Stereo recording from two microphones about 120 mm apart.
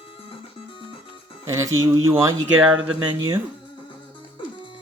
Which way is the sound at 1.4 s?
25° right (ahead or behind).